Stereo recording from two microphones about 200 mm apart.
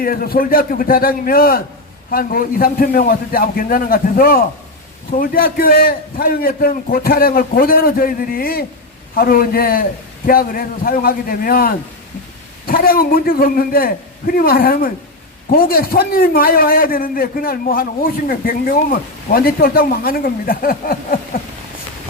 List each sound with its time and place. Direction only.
0.0 s a man's voice: 45° left (ahead or behind)